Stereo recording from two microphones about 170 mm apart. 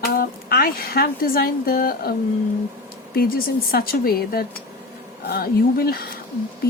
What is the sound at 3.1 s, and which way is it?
Speech, 60° left (ahead or behind).